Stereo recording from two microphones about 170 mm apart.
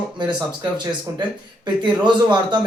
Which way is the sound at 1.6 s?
25° right (ahead or behind).